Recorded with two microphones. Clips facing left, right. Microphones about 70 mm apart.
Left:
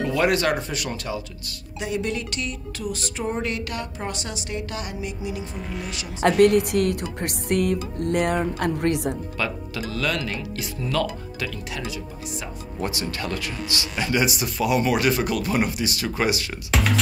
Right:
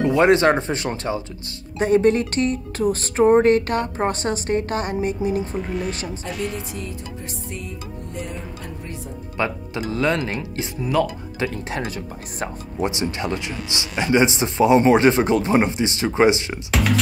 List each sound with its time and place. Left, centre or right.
0.0 s speech: right
6.2 s speech: left
9.4 s speech: right
11.4 s speech: right
12.7 s speech: right
16.7 s speech: centre